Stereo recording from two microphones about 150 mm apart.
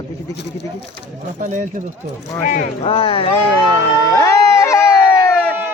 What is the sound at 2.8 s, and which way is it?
Speech, 35° left (ahead or behind).